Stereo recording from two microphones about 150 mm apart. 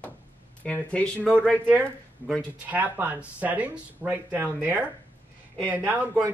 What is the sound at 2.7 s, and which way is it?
Speech, 10° right (ahead or behind).